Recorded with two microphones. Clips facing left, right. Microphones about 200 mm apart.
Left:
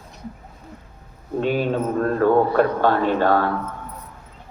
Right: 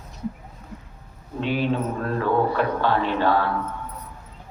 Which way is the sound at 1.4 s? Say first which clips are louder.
Left 3 dB; 45° left (ahead or behind).